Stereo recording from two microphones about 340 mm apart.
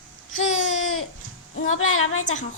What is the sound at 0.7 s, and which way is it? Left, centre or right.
Speech, left.